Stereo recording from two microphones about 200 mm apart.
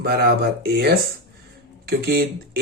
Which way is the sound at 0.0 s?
50° right (ahead or behind).